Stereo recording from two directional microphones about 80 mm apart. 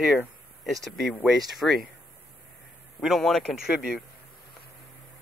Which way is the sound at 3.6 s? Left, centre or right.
Centre.